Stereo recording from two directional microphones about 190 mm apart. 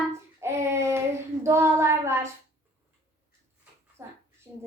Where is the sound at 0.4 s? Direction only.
15° right (ahead or behind).